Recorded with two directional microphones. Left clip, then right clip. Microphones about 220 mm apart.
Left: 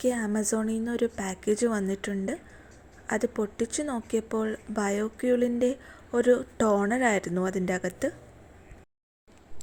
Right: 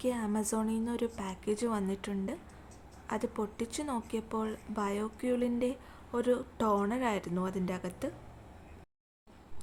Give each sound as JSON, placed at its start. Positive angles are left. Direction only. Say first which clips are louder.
{"t": 0.0, "sound": "a woman's voice", "louder": "left 6 dB", "side_deg": 15}